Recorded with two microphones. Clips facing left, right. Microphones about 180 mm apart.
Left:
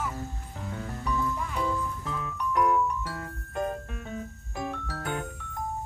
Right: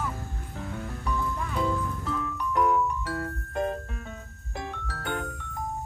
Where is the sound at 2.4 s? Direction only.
Centre (ahead or behind).